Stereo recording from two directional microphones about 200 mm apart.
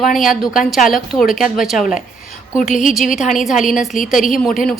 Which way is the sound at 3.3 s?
Centre (ahead or behind).